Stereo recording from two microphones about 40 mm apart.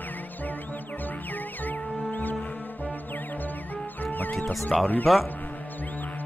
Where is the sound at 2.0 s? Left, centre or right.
Left.